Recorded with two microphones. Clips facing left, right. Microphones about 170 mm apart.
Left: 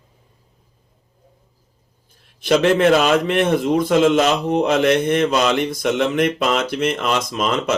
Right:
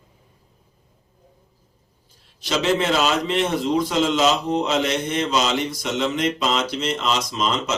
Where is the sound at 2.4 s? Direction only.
55° left (ahead or behind).